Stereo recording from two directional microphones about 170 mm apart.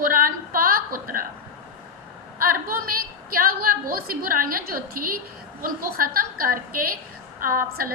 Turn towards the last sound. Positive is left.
turn(degrees=-55)  # may be behind; listen again after turning